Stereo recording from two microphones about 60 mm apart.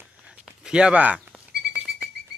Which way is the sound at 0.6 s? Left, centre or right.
Centre.